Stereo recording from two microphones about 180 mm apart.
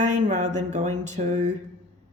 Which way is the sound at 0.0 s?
45° right (ahead or behind).